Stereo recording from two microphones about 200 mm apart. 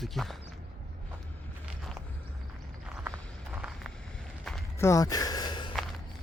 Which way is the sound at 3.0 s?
10° right (ahead or behind).